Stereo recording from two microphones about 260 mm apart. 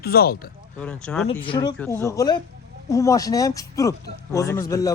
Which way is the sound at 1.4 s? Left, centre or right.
Centre.